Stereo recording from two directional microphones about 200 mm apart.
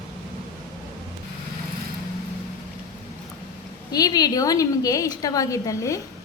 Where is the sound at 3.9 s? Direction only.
20° left (ahead or behind).